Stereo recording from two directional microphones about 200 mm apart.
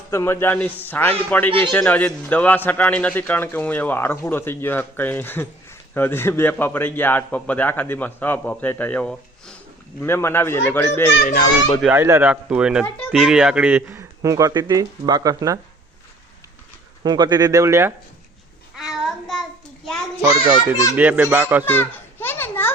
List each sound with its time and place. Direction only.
0.1 s a man's voice: 10° left (ahead or behind)
1.5 s speech: 25° right (ahead or behind)
1.7 s a man's voice: 10° left (ahead or behind)
11.8 s speech: 10° right (ahead or behind)
17.0 s speech: 20° right (ahead or behind)
18.8 s child singing: centre (ahead or behind)
20.2 s a child's voice: 25° left (ahead or behind)
20.9 s speech: 10° right (ahead or behind)
21.6 s children playing: 10° left (ahead or behind)